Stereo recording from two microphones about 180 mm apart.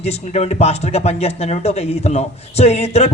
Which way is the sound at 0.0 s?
35° left (ahead or behind).